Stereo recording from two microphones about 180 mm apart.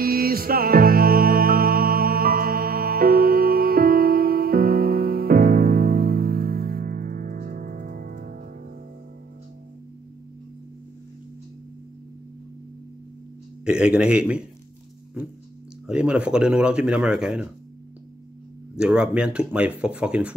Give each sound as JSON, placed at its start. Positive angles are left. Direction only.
{"t": 0.0, "sound": "music", "side_deg": -55}
{"t": 13.7, "sound": "a man's voice", "side_deg": -5}
{"t": 15.9, "sound": "speech", "side_deg": -5}
{"t": 18.8, "sound": "speech", "side_deg": -5}